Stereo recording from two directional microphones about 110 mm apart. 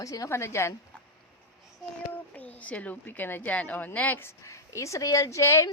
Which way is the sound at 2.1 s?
15° left (ahead or behind).